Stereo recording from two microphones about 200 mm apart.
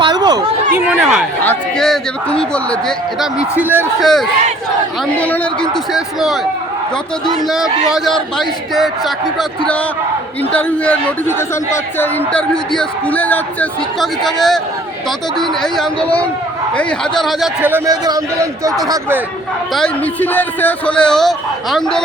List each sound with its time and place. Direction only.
0.0 s chatter: 20° right (ahead or behind)
0.9 s a man's voice: 5° right (ahead or behind)
3.6 s a man's voice: 10° right (ahead or behind)
4.0 s a man's voice: centre (ahead or behind)
7.4 s a man's voice: centre (ahead or behind)
19.7 s a man's voice: 5° left (ahead or behind)